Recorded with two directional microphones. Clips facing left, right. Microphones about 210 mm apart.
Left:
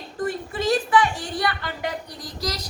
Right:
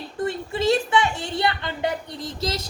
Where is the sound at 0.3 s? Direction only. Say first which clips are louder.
Right 2 dB; 25° right (ahead or behind).